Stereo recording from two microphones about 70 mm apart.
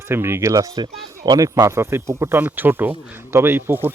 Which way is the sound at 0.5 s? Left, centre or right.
Right.